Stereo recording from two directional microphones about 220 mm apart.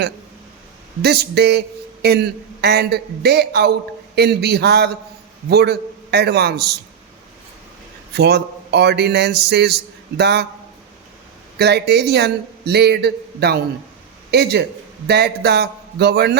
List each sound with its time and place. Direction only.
1.0 s speech: 45° right (ahead or behind)
8.1 s speech: 50° right (ahead or behind)
11.5 s speech: 50° right (ahead or behind)